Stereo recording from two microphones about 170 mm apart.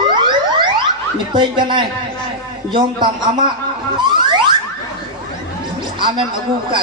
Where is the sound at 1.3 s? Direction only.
25° right (ahead or behind).